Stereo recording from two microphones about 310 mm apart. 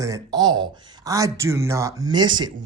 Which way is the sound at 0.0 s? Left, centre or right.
Centre.